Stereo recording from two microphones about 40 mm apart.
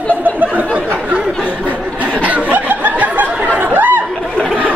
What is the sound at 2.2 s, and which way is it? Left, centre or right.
Snicker, right.